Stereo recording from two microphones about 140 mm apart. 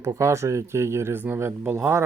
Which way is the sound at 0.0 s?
20° right (ahead or behind).